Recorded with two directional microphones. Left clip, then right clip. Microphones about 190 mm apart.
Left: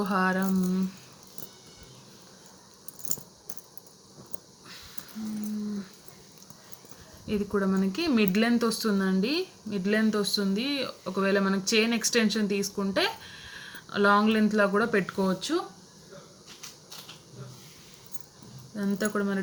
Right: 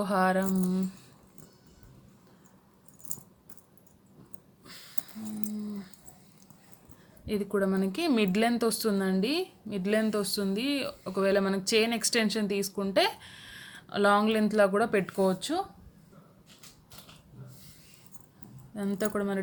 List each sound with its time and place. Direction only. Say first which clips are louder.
0.0 s speech: even; 45° right (ahead or behind)
7.3 s speech: even; 50° right (ahead or behind)
18.8 s speech: left 2 dB; 45° right (ahead or behind)